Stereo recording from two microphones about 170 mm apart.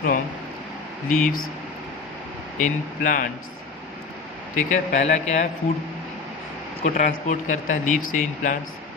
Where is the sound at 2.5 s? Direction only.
50° left (ahead or behind).